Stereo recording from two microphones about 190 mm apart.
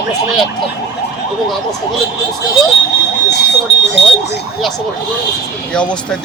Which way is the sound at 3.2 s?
65° left (ahead or behind).